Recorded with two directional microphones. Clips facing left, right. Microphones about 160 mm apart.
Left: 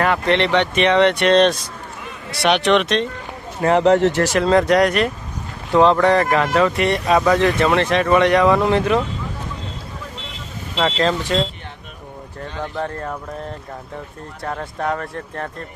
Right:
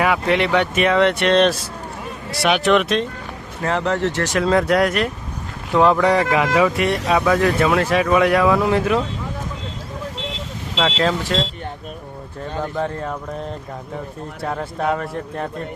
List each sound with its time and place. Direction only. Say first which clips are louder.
0.0 s speech: even; 5° right (ahead or behind)
3.6 s a man's voice: left 6 dB; 20° left (ahead or behind)
4.2 s speech: left 2 dB; centre (ahead or behind)
11.0 s speech: left 2 dB; centre (ahead or behind)
12.5 s speech: right 2 dB; 10° right (ahead or behind)
14.4 s speech: right 2 dB; 5° right (ahead or behind)